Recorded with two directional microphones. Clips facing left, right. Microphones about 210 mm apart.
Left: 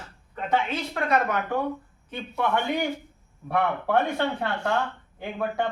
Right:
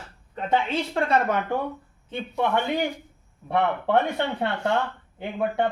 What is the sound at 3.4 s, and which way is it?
Speech, 20° right (ahead or behind).